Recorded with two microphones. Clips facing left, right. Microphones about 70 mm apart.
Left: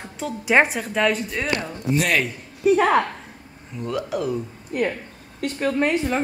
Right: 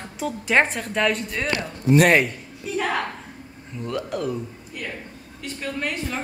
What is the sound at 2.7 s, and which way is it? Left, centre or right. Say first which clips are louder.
Speech: left 9 dB; left.